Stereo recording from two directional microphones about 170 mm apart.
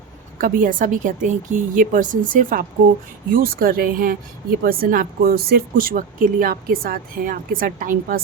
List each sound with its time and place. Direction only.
0.3 s a woman's voice: 50° right (ahead or behind)